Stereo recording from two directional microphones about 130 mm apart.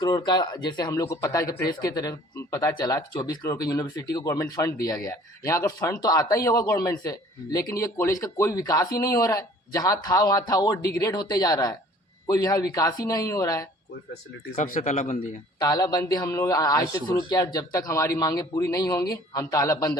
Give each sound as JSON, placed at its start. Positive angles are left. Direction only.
{"t": 0.0, "sound": "speech", "side_deg": 35}
{"t": 14.5, "sound": "a man's voice", "side_deg": 70}
{"t": 15.5, "sound": "speech", "side_deg": 30}